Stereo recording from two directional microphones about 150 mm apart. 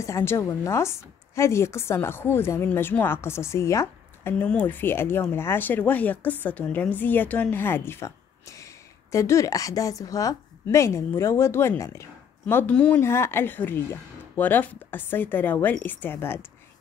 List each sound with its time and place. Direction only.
0.0 s a woman's voice: 20° left (ahead or behind)